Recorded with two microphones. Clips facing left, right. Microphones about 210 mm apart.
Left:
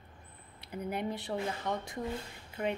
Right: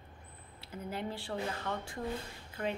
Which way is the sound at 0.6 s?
15° left (ahead or behind).